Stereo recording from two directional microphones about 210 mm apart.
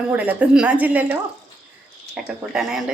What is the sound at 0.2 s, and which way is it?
A woman's voice, 5° right (ahead or behind).